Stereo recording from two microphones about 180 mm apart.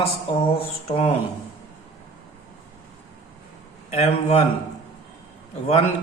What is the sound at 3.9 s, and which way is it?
Speech, 35° left (ahead or behind).